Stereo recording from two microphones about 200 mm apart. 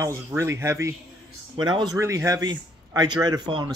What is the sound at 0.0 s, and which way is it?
Speech, 15° right (ahead or behind).